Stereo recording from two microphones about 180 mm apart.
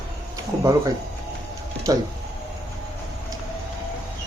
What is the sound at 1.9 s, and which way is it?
Speech, 20° right (ahead or behind).